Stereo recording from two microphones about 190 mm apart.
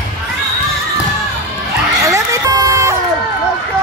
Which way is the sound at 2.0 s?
15° right (ahead or behind).